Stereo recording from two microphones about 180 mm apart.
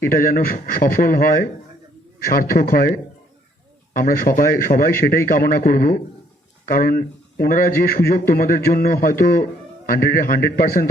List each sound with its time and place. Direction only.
0.0 s a man's voice: 50° left (ahead or behind)